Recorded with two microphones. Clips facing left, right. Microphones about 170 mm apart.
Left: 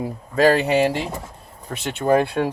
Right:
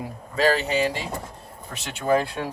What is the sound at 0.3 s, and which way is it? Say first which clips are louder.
A man's voice: left 5 dB; 55° left (ahead or behind).